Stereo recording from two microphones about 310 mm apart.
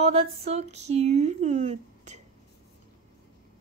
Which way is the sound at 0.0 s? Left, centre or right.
Centre.